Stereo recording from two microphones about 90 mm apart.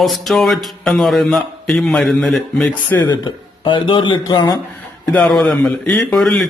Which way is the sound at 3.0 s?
60° left (ahead or behind).